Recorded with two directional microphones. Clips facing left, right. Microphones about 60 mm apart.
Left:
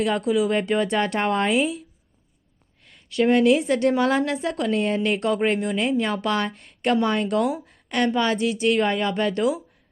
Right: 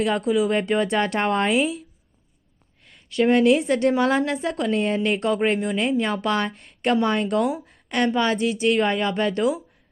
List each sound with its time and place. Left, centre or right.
0.0 s speech: right
3.2 s speech: right